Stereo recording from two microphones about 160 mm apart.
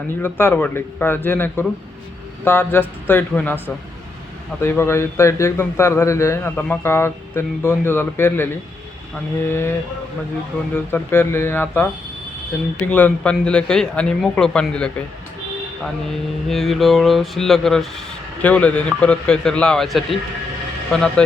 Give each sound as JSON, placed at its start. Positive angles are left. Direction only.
{"t": 0.2, "sound": "speech", "side_deg": 15}
{"t": 9.5, "sound": "speech", "side_deg": 15}
{"t": 10.9, "sound": "speech", "side_deg": 15}
{"t": 16.5, "sound": "a man's voice", "side_deg": 0}